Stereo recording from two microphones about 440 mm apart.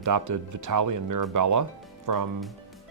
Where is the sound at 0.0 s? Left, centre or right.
Right.